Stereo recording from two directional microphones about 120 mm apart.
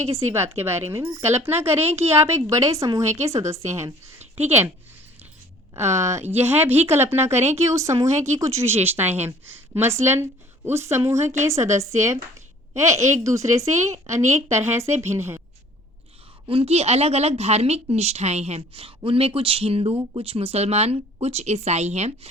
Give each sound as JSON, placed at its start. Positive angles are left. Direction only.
{"t": 0.0, "sound": "a woman's voice", "side_deg": -25}
{"t": 5.7, "sound": "a woman's voice", "side_deg": -20}
{"t": 16.5, "sound": "a woman's voice", "side_deg": -55}